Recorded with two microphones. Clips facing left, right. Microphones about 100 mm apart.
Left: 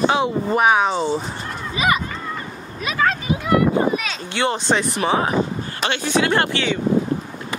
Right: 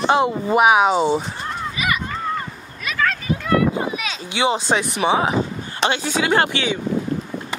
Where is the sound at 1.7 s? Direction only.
30° left (ahead or behind).